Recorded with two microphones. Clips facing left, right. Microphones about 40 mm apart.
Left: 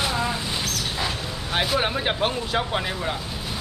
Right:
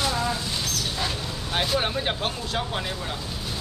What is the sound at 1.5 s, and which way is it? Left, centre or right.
Speech, centre.